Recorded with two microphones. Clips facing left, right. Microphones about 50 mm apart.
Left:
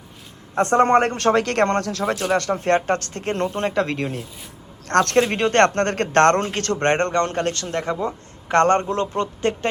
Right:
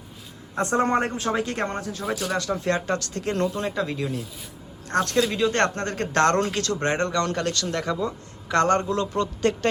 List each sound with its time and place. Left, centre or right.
0.5 s a man's voice: left
2.3 s speech: left
3.6 s speech: left
4.9 s speech: left
5.2 s speech: left
7.1 s a man's voice: left